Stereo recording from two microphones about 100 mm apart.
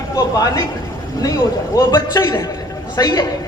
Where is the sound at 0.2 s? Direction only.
35° left (ahead or behind).